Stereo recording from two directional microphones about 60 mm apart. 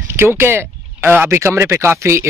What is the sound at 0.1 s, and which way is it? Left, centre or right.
Speech, right.